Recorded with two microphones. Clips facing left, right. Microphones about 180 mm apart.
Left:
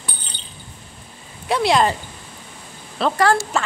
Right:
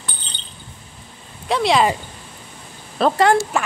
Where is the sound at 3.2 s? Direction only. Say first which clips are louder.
Even; 15° right (ahead or behind).